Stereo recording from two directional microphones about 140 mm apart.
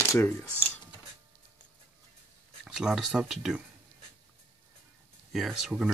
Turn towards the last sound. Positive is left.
turn(degrees=-5)  # may be behind; listen again after turning